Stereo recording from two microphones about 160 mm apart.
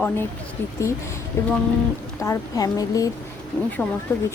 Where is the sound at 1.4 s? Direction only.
15° left (ahead or behind).